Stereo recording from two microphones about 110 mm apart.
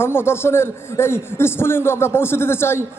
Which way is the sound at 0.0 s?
20° left (ahead or behind).